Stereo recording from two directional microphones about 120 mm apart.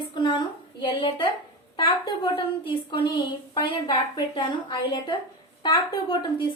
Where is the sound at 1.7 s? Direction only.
40° left (ahead or behind).